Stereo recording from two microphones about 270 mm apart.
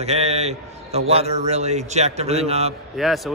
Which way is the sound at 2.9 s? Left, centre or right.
Centre.